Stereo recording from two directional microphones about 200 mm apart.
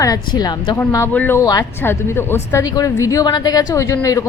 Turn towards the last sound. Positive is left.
turn(degrees=15)  # may be behind; listen again after turning